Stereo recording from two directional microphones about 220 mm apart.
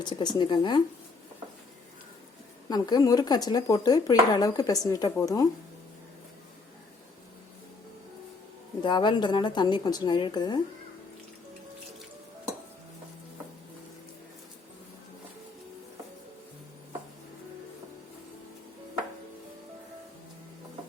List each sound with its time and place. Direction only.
0.0 s a woman's voice: 20° left (ahead or behind)
2.6 s speech: 20° left (ahead or behind)
8.8 s a woman's voice: 20° left (ahead or behind)